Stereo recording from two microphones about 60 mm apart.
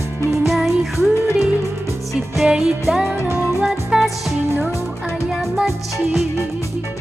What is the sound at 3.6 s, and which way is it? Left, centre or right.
Music, centre.